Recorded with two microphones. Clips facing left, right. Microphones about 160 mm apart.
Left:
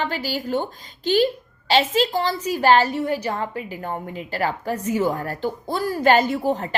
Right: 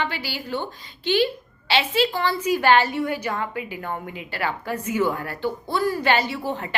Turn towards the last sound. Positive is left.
turn(degrees=40)  # may be behind; listen again after turning